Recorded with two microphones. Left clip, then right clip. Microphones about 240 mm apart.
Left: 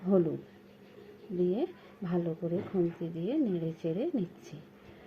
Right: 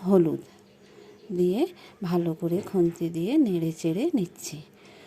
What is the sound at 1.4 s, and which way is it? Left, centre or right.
A woman's voice, right.